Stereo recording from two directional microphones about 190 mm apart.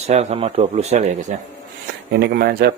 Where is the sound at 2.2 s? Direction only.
55° right (ahead or behind).